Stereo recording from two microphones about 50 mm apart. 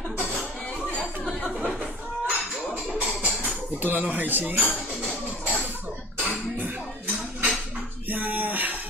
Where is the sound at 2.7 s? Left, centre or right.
Right.